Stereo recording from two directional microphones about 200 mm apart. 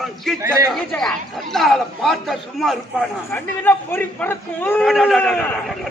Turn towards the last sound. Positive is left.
turn(degrees=0)  # may be behind; listen again after turning